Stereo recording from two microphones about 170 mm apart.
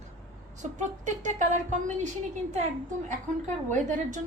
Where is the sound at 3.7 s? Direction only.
45° right (ahead or behind).